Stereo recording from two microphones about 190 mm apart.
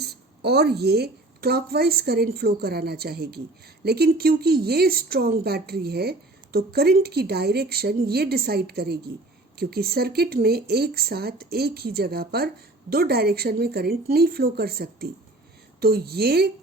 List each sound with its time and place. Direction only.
0.0 s a woman's voice: 60° right (ahead or behind)